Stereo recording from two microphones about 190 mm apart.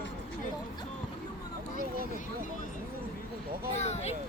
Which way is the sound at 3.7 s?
35° left (ahead or behind).